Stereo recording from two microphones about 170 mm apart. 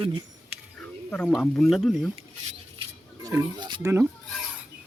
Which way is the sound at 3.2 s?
25° right (ahead or behind).